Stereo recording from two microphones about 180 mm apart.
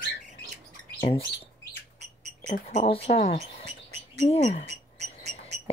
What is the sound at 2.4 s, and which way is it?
Speech, 40° left (ahead or behind).